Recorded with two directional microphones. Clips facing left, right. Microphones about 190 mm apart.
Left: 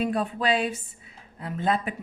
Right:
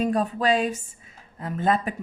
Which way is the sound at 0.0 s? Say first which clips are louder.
Right 3 dB; 45° right (ahead or behind).